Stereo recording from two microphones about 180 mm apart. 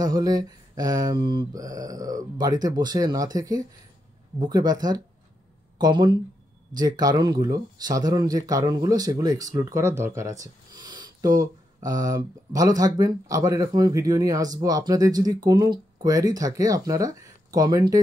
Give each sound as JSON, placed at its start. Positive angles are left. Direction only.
{"t": 0.0, "sound": "speech", "side_deg": -20}